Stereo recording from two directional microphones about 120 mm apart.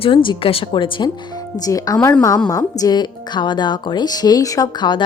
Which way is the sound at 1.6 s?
30° left (ahead or behind).